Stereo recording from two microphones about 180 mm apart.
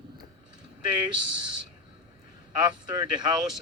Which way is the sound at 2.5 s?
25° right (ahead or behind).